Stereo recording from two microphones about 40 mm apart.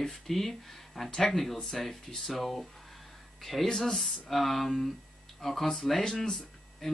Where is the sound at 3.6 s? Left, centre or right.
Centre.